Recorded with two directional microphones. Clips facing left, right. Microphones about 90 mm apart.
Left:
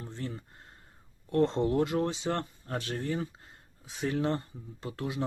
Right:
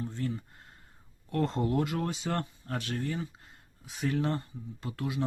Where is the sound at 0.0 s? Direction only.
30° left (ahead or behind).